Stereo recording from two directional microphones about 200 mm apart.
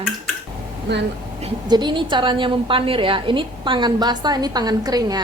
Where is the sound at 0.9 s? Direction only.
60° right (ahead or behind).